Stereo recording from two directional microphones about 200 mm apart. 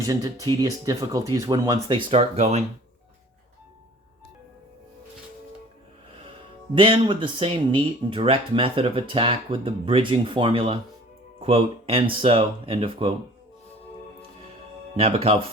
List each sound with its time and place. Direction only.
0.0 s speech: 15° right (ahead or behind); by 2.6 s 35° right (ahead or behind)
6.7 s speech: 25° right (ahead or behind)
14.9 s speech: 30° right (ahead or behind)